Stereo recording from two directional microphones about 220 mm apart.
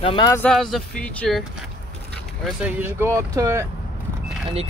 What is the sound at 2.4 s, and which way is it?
Speech, 10° right (ahead or behind).